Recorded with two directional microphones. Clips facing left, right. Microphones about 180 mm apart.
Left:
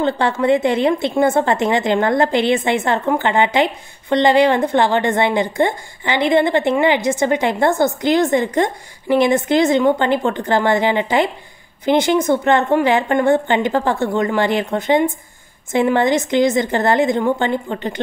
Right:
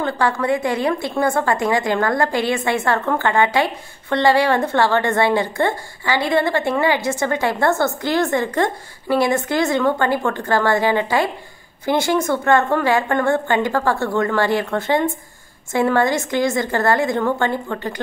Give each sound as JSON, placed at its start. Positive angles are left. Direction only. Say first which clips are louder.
{"t": 0.0, "sound": "a woman's voice", "louder": "left 3 dB", "side_deg": 25}